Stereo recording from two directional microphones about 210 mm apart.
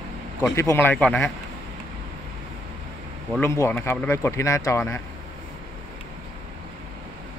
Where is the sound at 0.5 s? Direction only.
10° left (ahead or behind).